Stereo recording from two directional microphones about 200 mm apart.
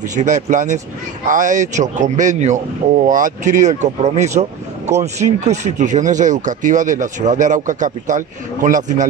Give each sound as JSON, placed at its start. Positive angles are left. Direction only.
{"t": 0.1, "sound": "speech", "side_deg": -40}